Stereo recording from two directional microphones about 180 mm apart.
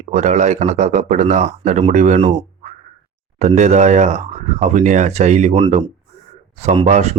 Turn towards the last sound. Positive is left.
turn(degrees=-40)  # may be behind; listen again after turning